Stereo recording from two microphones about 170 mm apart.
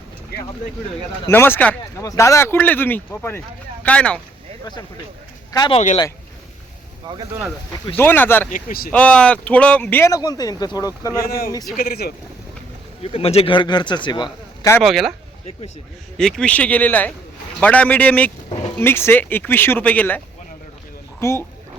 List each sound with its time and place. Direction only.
1.3 s speech: 10° left (ahead or behind)
5.5 s speech: 25° left (ahead or behind)
7.1 s speech: 20° right (ahead or behind)
7.9 s speech: 10° left (ahead or behind)
8.4 s speech: 55° left (ahead or behind)
8.9 s speech: 5° left (ahead or behind)
11.8 s speech: 60° left (ahead or behind)
13.0 s a man's voice: 35° left (ahead or behind)
14.8 s speech: centre (ahead or behind)
16.1 s speech: 5° left (ahead or behind)